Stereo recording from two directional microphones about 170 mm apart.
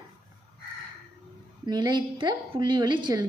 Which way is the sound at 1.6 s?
25° right (ahead or behind).